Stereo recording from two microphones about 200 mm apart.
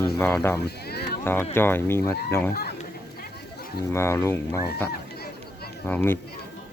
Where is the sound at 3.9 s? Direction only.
15° left (ahead or behind).